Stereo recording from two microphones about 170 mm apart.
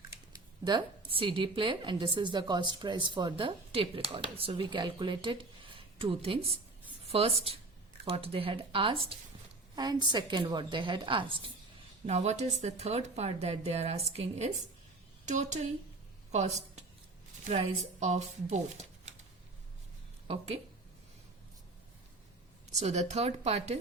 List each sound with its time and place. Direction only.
0.6 s a woman's voice: 30° right (ahead or behind)
20.2 s speech: 35° right (ahead or behind)
22.7 s speech: 40° right (ahead or behind)